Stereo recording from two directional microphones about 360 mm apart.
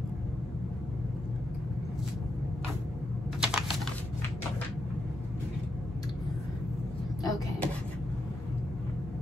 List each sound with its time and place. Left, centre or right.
3.3 s typing: centre
7.2 s vehicle: centre